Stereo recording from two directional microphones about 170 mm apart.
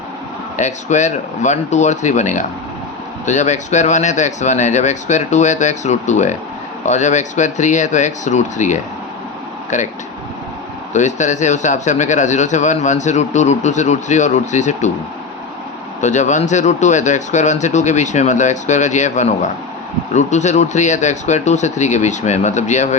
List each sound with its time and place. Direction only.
0.5 s speech: 45° left (ahead or behind)
10.9 s speech: 45° left (ahead or behind)
16.0 s speech: 45° left (ahead or behind)